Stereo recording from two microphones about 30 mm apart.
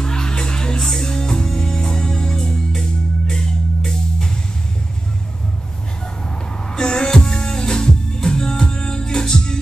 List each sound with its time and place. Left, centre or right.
0.0 s music: left
0.7 s music: centre
1.0 s music: left
6.7 s music: left